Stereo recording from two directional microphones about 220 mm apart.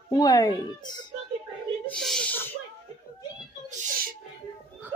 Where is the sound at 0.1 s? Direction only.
15° left (ahead or behind).